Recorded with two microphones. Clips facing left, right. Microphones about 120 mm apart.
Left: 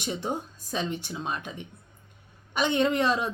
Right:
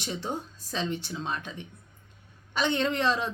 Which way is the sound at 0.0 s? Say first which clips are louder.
Left 2 dB; 15° left (ahead or behind).